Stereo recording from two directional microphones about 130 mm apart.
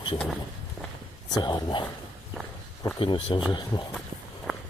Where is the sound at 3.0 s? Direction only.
40° left (ahead or behind).